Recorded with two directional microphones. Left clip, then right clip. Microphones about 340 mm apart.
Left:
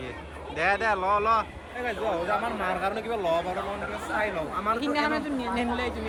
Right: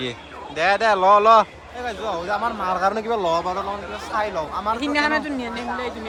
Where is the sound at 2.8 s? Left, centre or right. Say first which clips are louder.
Right 7 dB; centre.